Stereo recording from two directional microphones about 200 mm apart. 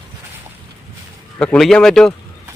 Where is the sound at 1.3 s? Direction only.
5° left (ahead or behind).